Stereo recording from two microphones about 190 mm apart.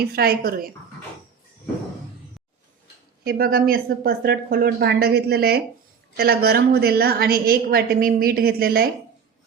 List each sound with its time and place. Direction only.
0.0 s a woman's voice: 55° right (ahead or behind)
3.2 s a woman's voice: 55° right (ahead or behind)